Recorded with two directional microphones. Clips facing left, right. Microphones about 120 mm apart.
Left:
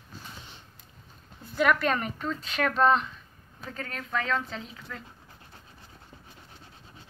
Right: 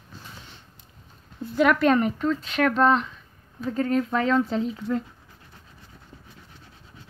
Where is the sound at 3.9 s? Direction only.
25° right (ahead or behind).